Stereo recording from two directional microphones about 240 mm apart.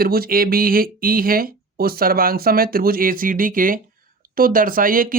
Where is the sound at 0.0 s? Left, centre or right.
Right.